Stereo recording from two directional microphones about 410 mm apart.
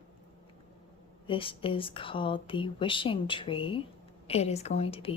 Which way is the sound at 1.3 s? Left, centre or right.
Centre.